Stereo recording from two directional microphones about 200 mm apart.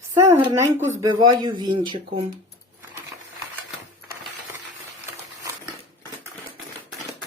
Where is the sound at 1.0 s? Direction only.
20° right (ahead or behind).